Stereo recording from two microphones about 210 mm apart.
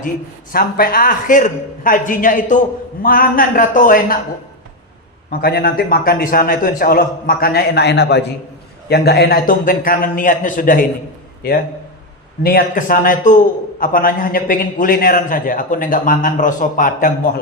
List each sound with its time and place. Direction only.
0.5 s a man's voice: 45° left (ahead or behind)
5.3 s a man's voice: 45° left (ahead or behind)